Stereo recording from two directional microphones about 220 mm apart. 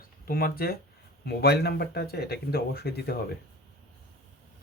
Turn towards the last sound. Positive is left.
turn(degrees=45)  # may be behind; listen again after turning